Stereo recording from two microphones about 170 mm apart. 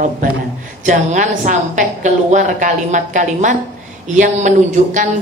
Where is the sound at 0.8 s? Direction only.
45° right (ahead or behind).